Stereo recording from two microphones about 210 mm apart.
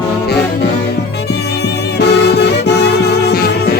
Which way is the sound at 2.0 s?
55° left (ahead or behind).